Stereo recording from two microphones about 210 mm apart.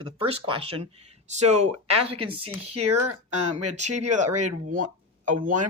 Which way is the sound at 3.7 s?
35° right (ahead or behind).